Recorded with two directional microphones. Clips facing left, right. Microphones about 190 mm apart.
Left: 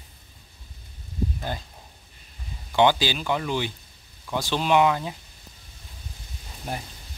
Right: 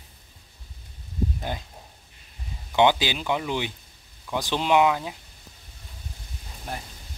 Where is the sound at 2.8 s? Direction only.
15° right (ahead or behind).